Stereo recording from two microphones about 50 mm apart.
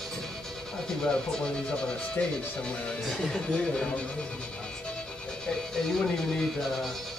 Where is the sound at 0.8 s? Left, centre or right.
Centre.